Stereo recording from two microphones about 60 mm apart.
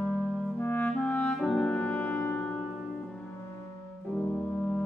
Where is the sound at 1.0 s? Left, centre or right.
Left.